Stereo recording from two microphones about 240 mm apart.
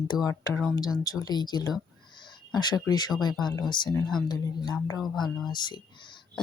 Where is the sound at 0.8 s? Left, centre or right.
Centre.